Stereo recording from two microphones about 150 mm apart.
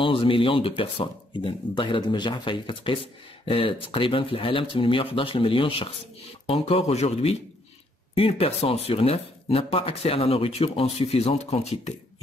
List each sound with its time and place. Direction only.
0.0 s speech: 35° left (ahead or behind)